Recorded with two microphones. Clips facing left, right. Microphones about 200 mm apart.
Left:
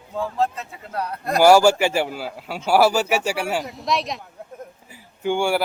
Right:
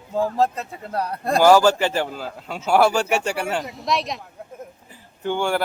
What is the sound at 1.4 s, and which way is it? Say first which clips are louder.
Speech: left 1 dB; 10° left (ahead or behind).